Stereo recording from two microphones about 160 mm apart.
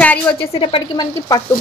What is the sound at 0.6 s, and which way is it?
Speech, 35° left (ahead or behind).